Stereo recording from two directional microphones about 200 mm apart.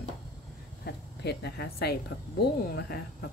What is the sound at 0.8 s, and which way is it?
Speech, 55° left (ahead or behind).